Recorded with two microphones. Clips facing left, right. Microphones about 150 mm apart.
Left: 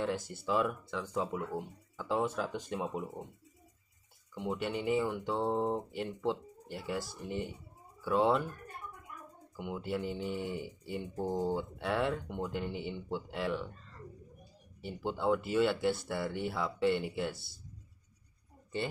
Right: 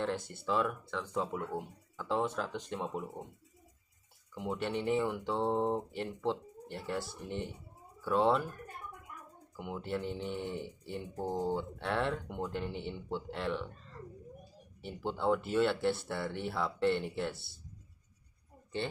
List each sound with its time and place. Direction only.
0.5 s speech: 5° left (ahead or behind)
4.4 s speech: 5° left (ahead or behind)
9.6 s speech: centre (ahead or behind)
14.8 s speech: 5° left (ahead or behind)